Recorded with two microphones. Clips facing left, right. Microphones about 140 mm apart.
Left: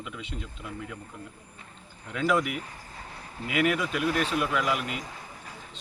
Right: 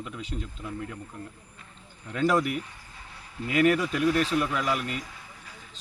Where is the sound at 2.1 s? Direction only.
35° right (ahead or behind).